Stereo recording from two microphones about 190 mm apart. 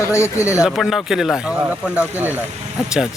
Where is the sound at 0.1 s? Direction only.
15° left (ahead or behind).